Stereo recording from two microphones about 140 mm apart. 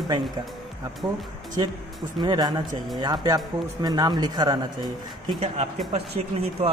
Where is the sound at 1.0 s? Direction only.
25° right (ahead or behind).